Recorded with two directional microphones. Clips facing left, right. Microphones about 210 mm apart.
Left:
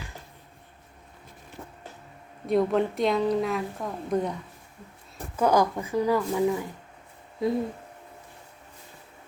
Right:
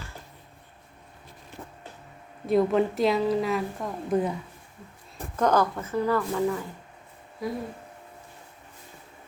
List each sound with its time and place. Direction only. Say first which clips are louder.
2.5 s a woman's voice: right 1 dB; centre (ahead or behind)
5.4 s speech: left 1 dB; 10° left (ahead or behind)
7.4 s a sound: left 6 dB; 25° left (ahead or behind)